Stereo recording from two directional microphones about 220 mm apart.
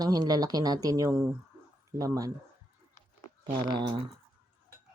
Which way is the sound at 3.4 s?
20° right (ahead or behind).